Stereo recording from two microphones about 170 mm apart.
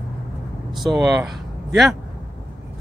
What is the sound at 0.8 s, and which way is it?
Speech, centre (ahead or behind).